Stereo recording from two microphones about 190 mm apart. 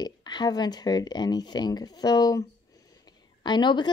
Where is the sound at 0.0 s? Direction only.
20° left (ahead or behind).